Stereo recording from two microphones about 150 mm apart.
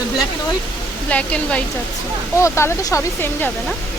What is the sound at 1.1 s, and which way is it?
Speech, 10° left (ahead or behind).